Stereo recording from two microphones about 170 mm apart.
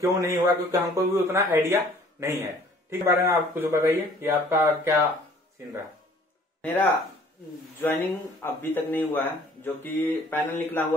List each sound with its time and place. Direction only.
0.2 s speech: 20° right (ahead or behind)
6.6 s speech: 10° left (ahead or behind)